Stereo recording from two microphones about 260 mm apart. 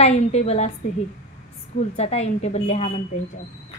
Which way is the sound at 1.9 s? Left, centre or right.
Left.